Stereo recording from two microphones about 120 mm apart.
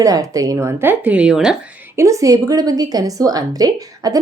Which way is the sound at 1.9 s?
25° right (ahead or behind).